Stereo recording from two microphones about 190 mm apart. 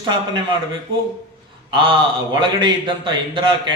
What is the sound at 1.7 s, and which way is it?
Speech, 25° right (ahead or behind).